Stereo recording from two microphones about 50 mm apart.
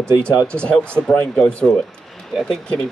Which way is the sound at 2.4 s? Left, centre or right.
Centre.